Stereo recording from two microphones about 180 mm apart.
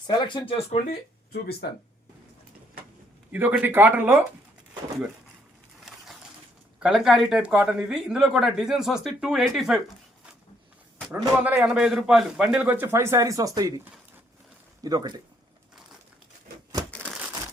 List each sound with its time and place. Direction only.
0.1 s speech: 25° left (ahead or behind)
3.3 s a man's voice: 10° right (ahead or behind)
6.7 s speech: 5° right (ahead or behind)
11.1 s a man's voice: 10° right (ahead or behind)
17.0 s crumpling: 5° right (ahead or behind)